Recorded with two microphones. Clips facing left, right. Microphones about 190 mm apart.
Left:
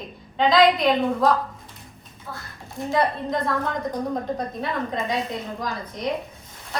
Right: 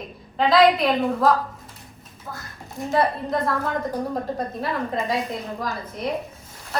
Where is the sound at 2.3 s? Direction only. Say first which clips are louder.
Right 1 dB; 15° right (ahead or behind).